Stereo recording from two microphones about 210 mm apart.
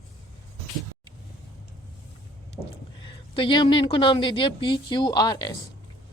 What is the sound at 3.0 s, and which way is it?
Speech, 25° left (ahead or behind).